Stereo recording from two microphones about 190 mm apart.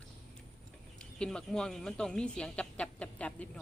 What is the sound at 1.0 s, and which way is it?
Speech, 5° left (ahead or behind).